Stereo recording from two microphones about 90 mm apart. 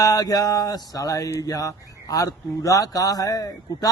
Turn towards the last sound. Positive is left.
turn(degrees=40)  # may be behind; listen again after turning